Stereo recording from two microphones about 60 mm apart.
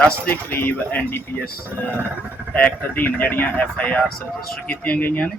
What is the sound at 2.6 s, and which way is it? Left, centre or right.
Speech, left.